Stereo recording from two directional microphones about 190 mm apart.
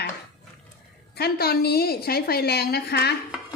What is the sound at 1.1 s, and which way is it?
A woman's voice, 55° left (ahead or behind).